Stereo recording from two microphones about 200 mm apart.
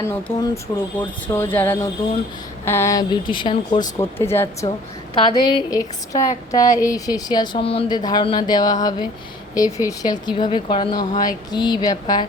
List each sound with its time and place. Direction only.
0.1 s speech: 15° left (ahead or behind)
4.0 s speech: 10° left (ahead or behind)